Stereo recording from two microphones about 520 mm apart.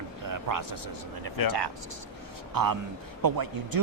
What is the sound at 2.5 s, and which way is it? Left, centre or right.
Speech, right.